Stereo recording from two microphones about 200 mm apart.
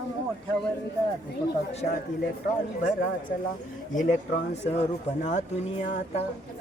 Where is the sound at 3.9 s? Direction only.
40° left (ahead or behind).